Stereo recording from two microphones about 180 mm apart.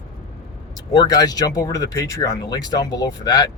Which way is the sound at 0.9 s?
20° left (ahead or behind).